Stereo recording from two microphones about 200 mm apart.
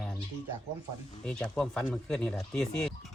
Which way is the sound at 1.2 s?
5° left (ahead or behind).